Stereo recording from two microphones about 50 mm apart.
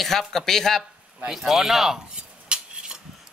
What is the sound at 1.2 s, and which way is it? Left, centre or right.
Speech, centre.